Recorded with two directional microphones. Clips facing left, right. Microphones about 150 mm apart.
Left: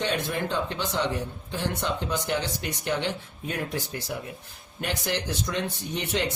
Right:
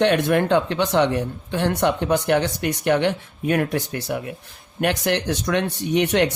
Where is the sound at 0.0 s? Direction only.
70° right (ahead or behind).